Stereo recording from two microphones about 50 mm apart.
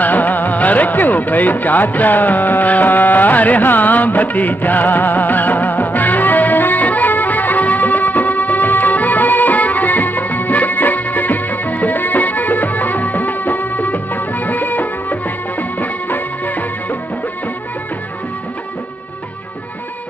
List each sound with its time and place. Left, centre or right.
0.0 s music: left
15.8 s music of bollywood: left